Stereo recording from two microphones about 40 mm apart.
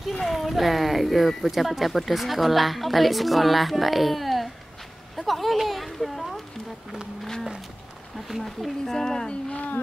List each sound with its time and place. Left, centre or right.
0.3 s speech: centre
5.1 s a sound: centre
8.3 s speech: centre
8.9 s speech: centre
9.3 s music: left